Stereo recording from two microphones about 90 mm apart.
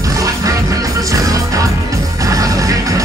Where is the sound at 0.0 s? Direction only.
40° right (ahead or behind).